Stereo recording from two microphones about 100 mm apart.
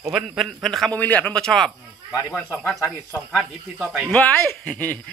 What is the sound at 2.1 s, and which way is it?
Speech, 30° left (ahead or behind).